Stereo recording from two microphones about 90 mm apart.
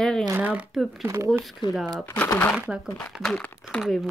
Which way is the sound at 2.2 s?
30° left (ahead or behind).